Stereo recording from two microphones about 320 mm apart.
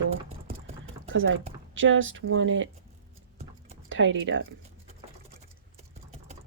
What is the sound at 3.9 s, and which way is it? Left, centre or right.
Speech, right.